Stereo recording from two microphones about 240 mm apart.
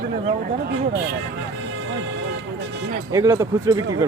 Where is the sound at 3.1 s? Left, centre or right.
Centre.